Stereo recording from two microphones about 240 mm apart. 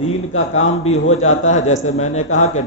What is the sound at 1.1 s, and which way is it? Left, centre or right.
A man's voice, left.